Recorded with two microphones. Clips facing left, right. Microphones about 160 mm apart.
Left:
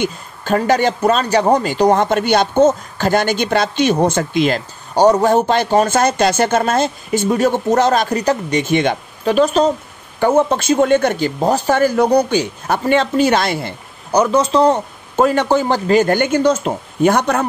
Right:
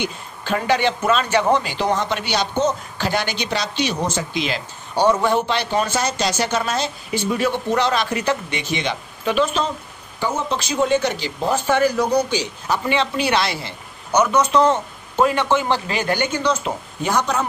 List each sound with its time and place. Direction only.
0.0 s speech: 45° left (ahead or behind)
10.2 s speech: 50° left (ahead or behind)
14.1 s speech: 30° left (ahead or behind); by 17.5 s 60° left (ahead or behind)